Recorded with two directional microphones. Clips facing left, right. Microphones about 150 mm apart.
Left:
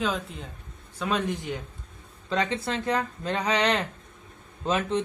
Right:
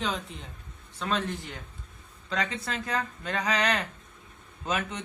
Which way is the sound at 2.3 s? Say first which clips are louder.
Left 5 dB; 30° left (ahead or behind).